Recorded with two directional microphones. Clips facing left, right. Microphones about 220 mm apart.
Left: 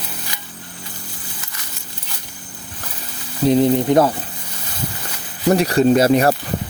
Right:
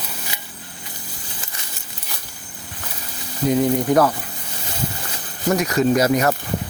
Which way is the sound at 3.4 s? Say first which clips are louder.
Left 4 dB; 25° left (ahead or behind).